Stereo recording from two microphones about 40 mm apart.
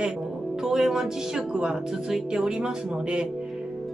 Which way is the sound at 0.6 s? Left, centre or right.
Centre.